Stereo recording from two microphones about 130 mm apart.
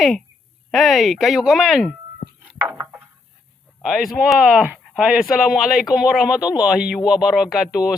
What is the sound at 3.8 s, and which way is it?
Speech, 5° right (ahead or behind).